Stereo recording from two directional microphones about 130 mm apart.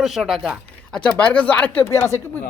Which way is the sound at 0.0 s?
Centre (ahead or behind).